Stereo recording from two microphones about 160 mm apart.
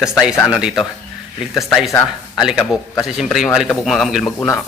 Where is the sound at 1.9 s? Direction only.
25° left (ahead or behind).